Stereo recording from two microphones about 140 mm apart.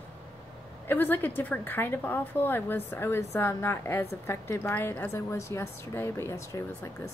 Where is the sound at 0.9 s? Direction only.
15° left (ahead or behind).